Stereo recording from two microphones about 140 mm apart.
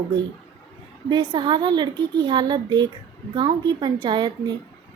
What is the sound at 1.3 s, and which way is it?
A woman's voice, 30° right (ahead or behind).